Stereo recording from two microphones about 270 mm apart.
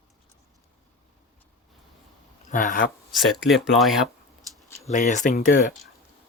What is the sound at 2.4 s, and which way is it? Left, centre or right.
Speech, left.